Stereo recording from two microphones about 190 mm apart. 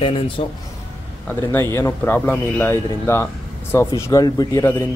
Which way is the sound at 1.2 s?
10° left (ahead or behind).